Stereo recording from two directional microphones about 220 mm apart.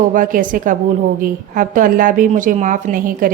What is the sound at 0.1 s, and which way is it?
A woman's voice, 40° right (ahead or behind).